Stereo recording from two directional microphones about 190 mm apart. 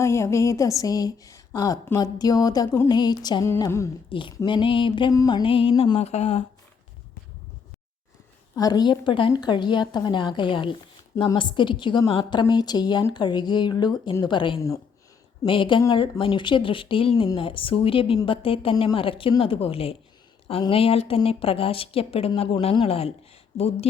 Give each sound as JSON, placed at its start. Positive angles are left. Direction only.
{"t": 0.0, "sound": "speech", "side_deg": 15}
{"t": 4.1, "sound": "speech", "side_deg": 25}
{"t": 8.5, "sound": "speech", "side_deg": 20}